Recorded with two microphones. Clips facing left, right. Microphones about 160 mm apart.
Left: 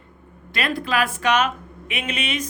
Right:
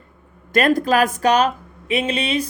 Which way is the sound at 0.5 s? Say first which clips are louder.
Right 8 dB; 45° right (ahead or behind).